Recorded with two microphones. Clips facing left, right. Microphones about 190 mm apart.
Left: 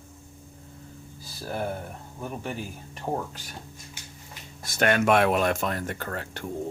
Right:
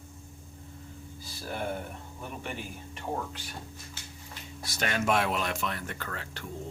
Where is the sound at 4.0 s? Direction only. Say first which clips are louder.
Left 1 dB; 15° left (ahead or behind).